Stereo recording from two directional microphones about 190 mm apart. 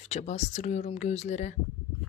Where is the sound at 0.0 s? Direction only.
35° left (ahead or behind).